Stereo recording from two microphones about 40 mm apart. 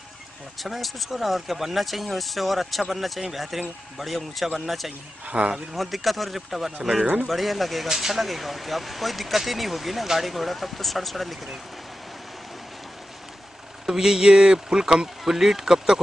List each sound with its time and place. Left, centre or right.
0.6 s speech: centre
5.2 s speech: right
5.8 s speech: centre
7.9 s speech: centre
13.8 s speech: centre